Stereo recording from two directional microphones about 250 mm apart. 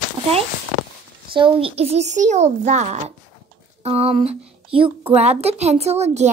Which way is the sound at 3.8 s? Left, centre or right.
Right.